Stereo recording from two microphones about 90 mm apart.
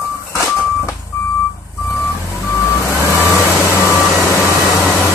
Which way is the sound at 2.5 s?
30° left (ahead or behind).